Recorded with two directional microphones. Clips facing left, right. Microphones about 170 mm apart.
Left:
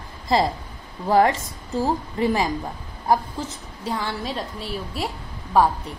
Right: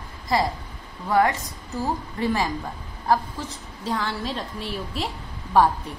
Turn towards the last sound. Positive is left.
turn(degrees=10)  # may be behind; listen again after turning